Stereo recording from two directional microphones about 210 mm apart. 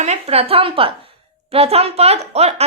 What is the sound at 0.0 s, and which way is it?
A woman's voice, 30° right (ahead or behind).